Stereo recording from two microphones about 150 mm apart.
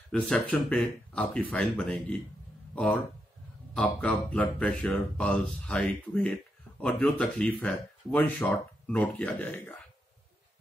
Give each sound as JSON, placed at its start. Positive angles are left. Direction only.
{"t": 0.1, "sound": "speech", "side_deg": 5}